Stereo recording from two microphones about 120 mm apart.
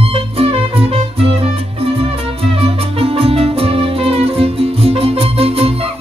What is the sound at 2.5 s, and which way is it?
Music, 55° right (ahead or behind).